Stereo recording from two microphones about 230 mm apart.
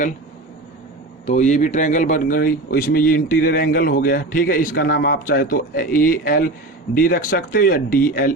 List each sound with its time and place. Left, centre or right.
1.3 s speech: left